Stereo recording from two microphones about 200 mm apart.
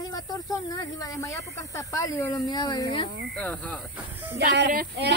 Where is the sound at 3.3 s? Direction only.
5° left (ahead or behind).